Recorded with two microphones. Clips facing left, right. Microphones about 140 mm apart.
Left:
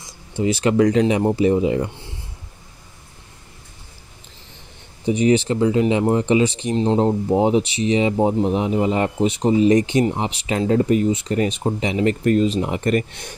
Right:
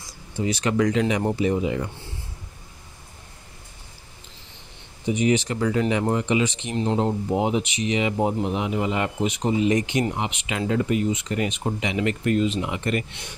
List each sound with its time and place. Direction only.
0.4 s speech: 30° left (ahead or behind)
5.0 s speech: 35° left (ahead or behind)